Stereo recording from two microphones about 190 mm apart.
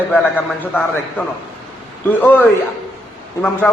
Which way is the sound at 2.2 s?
10° left (ahead or behind).